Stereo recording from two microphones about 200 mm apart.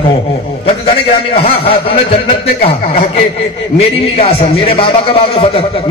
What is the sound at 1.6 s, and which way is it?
A man's voice, 30° left (ahead or behind).